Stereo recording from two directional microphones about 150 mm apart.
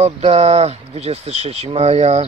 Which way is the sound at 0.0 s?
45° right (ahead or behind).